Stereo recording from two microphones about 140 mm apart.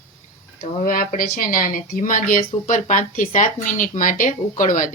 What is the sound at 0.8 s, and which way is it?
Speech, 80° left.